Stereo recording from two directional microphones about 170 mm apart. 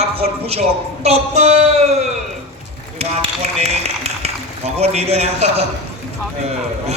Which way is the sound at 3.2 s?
40° right (ahead or behind).